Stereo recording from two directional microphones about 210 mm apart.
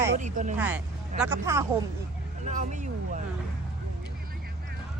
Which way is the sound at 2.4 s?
35° right (ahead or behind).